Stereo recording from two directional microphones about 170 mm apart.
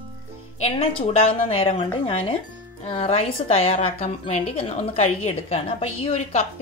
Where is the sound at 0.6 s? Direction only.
35° left (ahead or behind).